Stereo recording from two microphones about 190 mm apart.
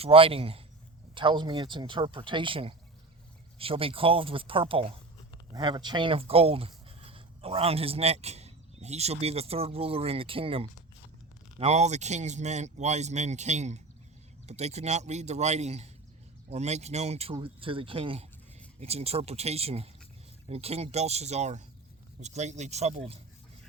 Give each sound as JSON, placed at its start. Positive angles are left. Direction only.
{"t": 0.0, "sound": "speech", "side_deg": -30}